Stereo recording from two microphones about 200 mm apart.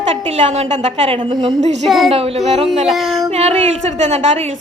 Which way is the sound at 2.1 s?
30° right (ahead or behind).